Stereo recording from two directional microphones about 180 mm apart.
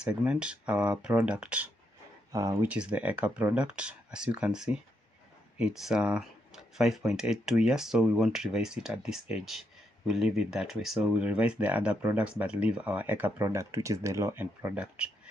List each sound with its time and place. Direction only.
0.0 s speech: 5° right (ahead or behind)
2.3 s speech: 20° right (ahead or behind)
2.7 s speech: 5° right (ahead or behind)